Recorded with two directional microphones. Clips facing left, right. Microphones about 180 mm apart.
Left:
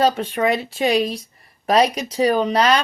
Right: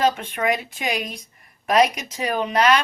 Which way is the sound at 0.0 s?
35° left (ahead or behind).